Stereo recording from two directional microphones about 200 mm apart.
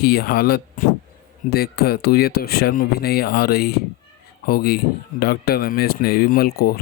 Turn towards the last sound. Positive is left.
turn(degrees=50)  # may be behind; listen again after turning